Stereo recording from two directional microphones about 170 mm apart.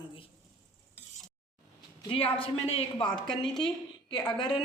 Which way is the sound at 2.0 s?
35° left (ahead or behind).